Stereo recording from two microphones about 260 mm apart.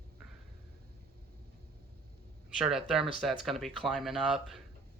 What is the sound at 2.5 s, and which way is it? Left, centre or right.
Speech, centre.